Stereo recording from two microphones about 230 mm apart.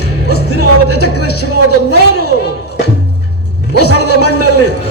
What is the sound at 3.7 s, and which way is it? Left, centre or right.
Music, left.